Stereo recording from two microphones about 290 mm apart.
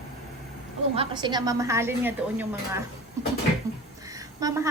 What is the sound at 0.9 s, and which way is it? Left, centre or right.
A woman's voice, centre.